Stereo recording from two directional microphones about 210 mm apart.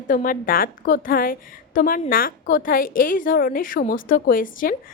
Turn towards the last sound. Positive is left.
turn(degrees=40)  # may be behind; listen again after turning